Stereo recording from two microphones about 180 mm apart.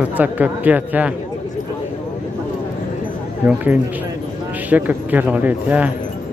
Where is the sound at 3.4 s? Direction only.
10° right (ahead or behind).